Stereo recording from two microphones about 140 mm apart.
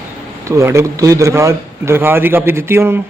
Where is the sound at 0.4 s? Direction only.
20° right (ahead or behind).